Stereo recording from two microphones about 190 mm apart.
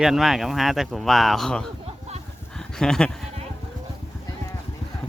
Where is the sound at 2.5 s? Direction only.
5° left (ahead or behind).